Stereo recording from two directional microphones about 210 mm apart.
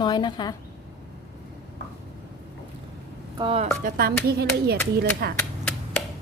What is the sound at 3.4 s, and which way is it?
Speech, 25° right (ahead or behind).